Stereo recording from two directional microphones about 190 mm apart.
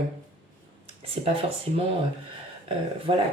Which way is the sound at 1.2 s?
30° right (ahead or behind).